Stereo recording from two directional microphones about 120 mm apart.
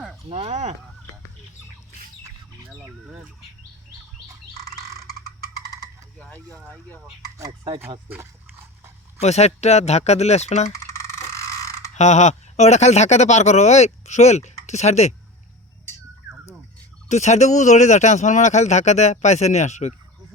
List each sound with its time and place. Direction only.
0.3 s speech: 60° right (ahead or behind)
6.1 s speech: 10° left (ahead or behind)
9.2 s speech: 65° left (ahead or behind)
10.7 s a sound: 25° left (ahead or behind)
11.9 s speech: 75° left (ahead or behind)
17.1 s speech: 75° left (ahead or behind)